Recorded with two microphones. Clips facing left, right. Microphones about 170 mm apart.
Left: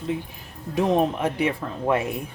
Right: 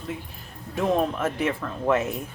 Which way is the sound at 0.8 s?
15° left (ahead or behind).